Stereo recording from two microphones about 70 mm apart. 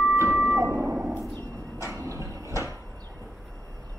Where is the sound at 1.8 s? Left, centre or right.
Right.